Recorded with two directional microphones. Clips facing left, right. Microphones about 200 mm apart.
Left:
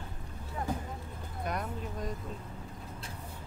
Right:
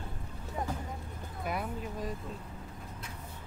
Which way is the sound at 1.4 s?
5° right (ahead or behind).